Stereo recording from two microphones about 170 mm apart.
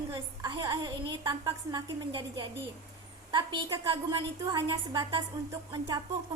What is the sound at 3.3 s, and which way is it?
A woman's voice, 25° right (ahead or behind).